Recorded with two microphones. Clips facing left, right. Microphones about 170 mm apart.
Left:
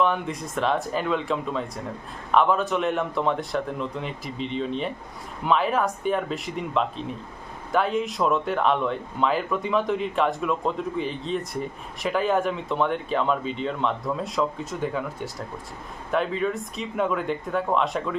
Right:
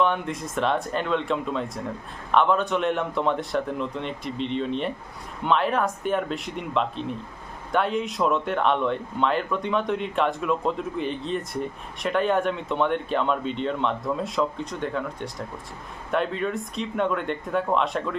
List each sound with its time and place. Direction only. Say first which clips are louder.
0.0 s speech: even; centre (ahead or behind)